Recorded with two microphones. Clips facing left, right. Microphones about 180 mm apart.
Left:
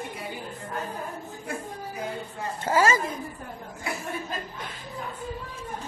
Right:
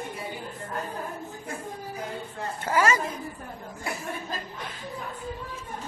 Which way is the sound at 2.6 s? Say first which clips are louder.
Left 2 dB; 25° left (ahead or behind).